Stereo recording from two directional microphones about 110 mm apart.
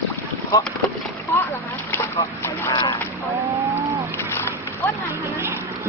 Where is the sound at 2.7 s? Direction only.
45° left (ahead or behind).